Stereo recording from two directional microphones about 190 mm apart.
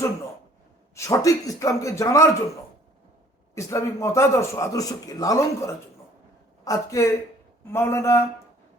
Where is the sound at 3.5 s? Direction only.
15° left (ahead or behind).